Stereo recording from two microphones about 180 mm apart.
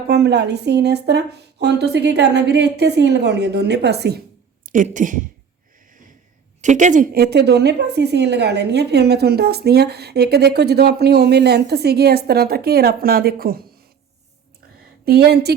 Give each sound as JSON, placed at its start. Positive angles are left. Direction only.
{"t": 0.1, "sound": "speech", "side_deg": -65}
{"t": 4.6, "sound": "speech", "side_deg": -45}
{"t": 6.6, "sound": "a woman's voice", "side_deg": -40}
{"t": 15.0, "sound": "a woman's voice", "side_deg": -60}